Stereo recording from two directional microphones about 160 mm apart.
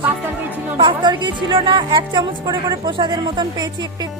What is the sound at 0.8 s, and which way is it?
Speech, 30° right (ahead or behind).